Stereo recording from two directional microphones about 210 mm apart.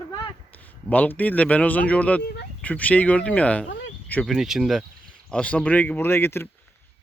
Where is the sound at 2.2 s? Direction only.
50° left (ahead or behind).